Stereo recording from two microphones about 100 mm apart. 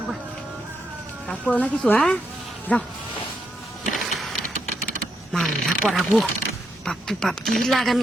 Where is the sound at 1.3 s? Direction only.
15° left (ahead or behind).